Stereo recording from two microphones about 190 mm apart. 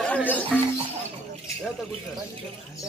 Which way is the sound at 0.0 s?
5° left (ahead or behind).